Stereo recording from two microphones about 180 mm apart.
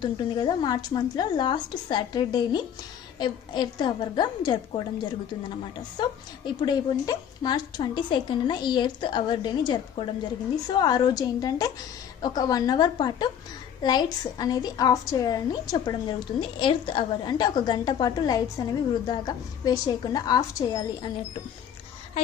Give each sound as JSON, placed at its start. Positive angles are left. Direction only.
{"t": 0.0, "sound": "a woman's voice", "side_deg": 25}
{"t": 6.0, "sound": "a woman's voice", "side_deg": 25}